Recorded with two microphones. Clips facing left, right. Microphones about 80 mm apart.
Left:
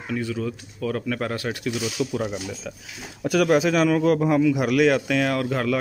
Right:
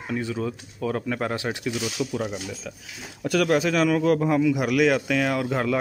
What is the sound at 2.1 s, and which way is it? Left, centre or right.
Speech, centre.